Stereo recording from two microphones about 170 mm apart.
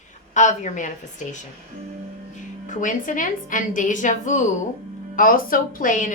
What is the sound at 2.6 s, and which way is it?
Speech, 50° left (ahead or behind).